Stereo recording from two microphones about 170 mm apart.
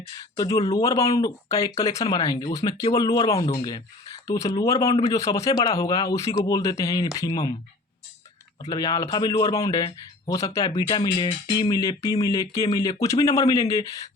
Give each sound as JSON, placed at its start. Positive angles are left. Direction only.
{"t": 0.3, "sound": "speech", "side_deg": 20}
{"t": 8.7, "sound": "speech", "side_deg": 25}